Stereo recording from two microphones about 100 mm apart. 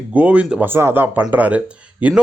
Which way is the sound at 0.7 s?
20° right (ahead or behind).